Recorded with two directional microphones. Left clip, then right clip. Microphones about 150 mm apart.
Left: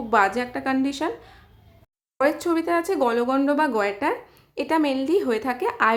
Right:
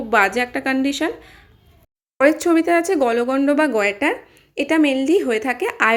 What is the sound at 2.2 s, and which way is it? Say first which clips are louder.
Speech: right 6 dB; 20° right (ahead or behind).